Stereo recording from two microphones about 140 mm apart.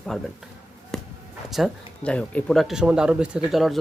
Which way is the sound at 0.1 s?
5° left (ahead or behind).